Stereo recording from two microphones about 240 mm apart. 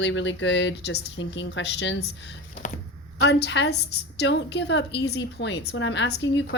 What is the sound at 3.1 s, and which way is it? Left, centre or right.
Speech, left.